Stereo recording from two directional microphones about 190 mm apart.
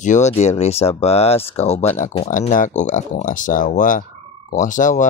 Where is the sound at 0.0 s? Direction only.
40° left (ahead or behind).